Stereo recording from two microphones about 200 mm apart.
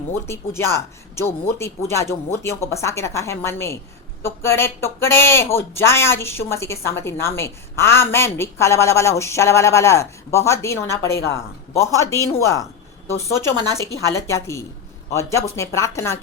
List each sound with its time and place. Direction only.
0.1 s speech: 15° left (ahead or behind)